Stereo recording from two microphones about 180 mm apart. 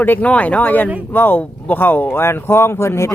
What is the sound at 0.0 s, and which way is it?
Speech, 10° left (ahead or behind).